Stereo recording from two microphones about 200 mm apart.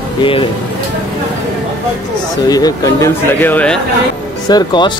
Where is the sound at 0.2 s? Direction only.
25° left (ahead or behind).